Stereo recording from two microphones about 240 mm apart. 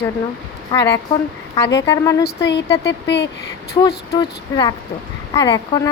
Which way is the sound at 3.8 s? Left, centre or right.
Centre.